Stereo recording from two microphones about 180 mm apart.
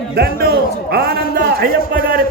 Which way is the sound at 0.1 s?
60° right (ahead or behind).